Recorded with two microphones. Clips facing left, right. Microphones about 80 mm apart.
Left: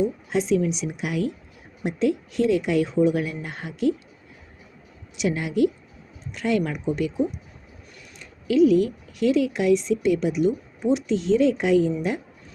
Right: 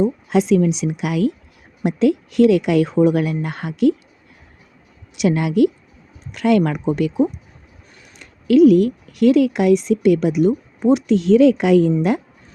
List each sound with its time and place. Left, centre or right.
0.3 s speech: right
5.1 s a woman's voice: right